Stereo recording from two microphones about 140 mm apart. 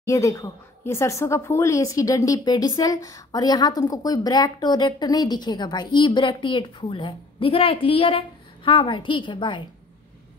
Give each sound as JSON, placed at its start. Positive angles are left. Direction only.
{"t": 0.0, "sound": "a woman's voice", "side_deg": 20}